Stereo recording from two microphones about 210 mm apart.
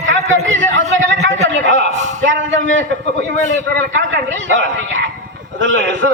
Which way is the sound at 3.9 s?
60° right (ahead or behind).